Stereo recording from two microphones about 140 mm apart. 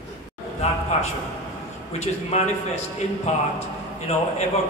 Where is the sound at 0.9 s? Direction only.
50° left (ahead or behind).